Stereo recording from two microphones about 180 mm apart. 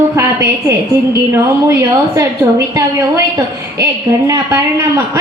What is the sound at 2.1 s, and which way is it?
Speech, 15° right (ahead or behind).